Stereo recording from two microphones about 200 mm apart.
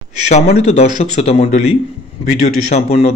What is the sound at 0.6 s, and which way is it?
A man's voice, 35° left (ahead or behind).